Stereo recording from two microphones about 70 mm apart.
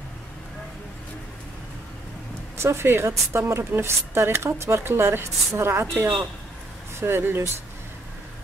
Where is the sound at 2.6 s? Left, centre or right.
Right.